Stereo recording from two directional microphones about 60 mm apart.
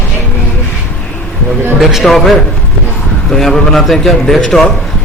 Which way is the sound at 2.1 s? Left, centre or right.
Centre.